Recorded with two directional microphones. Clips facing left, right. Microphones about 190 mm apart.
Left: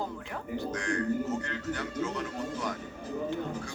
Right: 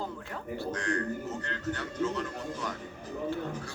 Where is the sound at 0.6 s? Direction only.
10° left (ahead or behind).